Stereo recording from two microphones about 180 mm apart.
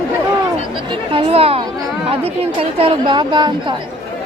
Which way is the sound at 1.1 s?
35° right (ahead or behind).